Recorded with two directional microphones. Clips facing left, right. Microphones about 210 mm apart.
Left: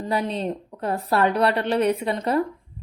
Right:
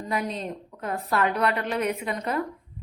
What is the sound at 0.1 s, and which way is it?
A woman's voice, 30° left (ahead or behind).